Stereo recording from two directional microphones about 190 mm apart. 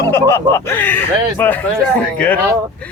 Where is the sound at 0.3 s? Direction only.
15° left (ahead or behind).